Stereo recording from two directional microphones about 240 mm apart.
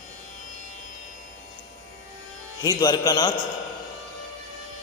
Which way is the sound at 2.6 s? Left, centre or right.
Centre.